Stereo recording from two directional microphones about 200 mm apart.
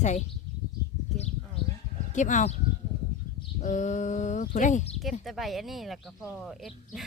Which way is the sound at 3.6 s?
40° left (ahead or behind).